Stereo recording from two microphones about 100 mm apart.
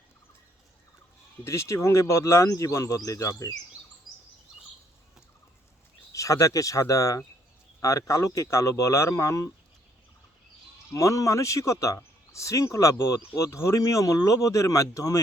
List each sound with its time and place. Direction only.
1.5 s speech: 30° left (ahead or behind)
6.1 s speech: 35° left (ahead or behind)
10.9 s speech: 35° left (ahead or behind)